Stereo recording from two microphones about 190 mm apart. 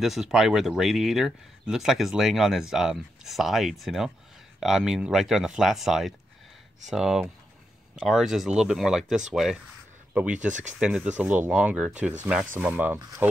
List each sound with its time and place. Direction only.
0.0 s speech: centre (ahead or behind)
10.5 s speech: 40° right (ahead or behind)
10.8 s speech: 5° right (ahead or behind)